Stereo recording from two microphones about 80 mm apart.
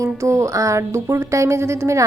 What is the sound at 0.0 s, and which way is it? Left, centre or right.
Speech, right.